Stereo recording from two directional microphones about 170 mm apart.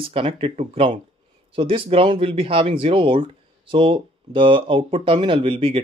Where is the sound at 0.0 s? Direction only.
30° right (ahead or behind).